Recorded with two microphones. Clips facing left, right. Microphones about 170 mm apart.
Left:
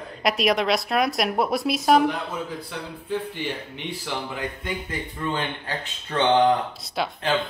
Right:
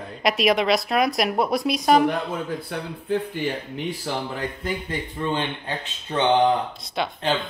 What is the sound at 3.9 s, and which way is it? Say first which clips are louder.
A man's voice: right 2 dB; 35° right (ahead or behind).